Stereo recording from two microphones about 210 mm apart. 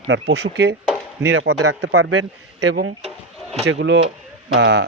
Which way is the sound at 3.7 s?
60° right (ahead or behind).